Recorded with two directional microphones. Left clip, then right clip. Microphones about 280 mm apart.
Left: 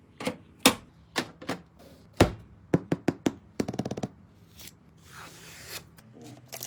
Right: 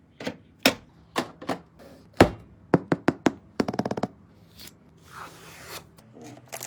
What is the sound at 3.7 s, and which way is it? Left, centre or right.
Machine gun, right.